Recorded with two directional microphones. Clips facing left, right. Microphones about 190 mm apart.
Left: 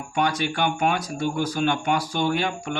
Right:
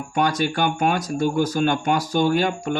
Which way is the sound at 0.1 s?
45° right (ahead or behind).